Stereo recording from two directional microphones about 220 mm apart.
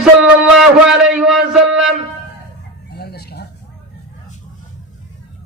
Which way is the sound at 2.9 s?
45° left (ahead or behind).